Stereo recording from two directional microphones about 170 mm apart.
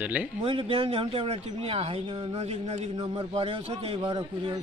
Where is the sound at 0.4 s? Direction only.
30° right (ahead or behind).